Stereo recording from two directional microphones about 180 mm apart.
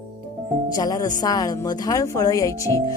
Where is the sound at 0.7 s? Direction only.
20° left (ahead or behind).